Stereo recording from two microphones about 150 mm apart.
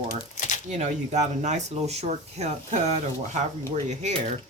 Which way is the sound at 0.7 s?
50° right (ahead or behind).